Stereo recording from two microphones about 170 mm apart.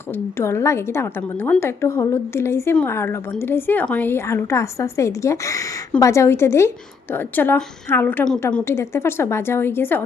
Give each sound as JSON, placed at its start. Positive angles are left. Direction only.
{"t": 0.1, "sound": "a woman's voice", "side_deg": 15}